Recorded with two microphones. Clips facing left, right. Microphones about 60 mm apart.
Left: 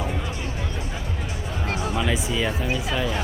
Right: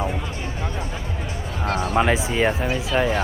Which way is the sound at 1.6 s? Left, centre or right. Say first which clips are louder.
Right 6 dB; right.